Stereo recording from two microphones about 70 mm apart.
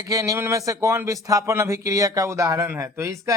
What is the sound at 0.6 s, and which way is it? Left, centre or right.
Speech, right.